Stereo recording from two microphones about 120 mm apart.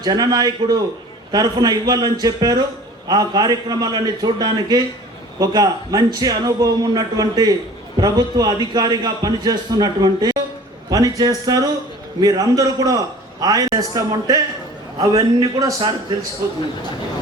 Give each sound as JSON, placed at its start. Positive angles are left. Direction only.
{"t": 0.0, "sound": "a man's voice", "side_deg": -35}